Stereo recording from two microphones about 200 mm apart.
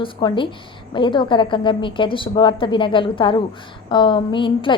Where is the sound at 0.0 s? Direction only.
25° left (ahead or behind).